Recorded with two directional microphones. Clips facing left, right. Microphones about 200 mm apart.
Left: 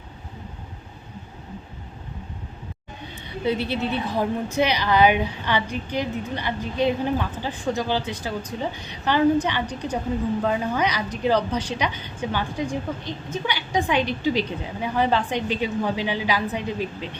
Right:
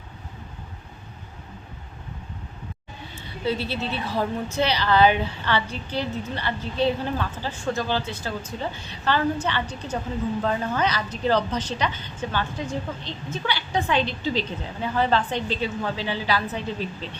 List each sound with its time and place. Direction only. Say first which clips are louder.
3.4 s a woman's voice: left 3 dB; 15° left (ahead or behind)